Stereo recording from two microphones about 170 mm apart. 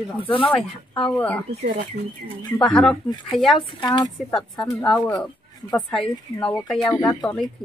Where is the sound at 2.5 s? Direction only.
5° left (ahead or behind).